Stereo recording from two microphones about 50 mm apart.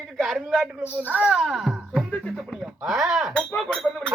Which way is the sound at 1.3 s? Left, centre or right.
Centre.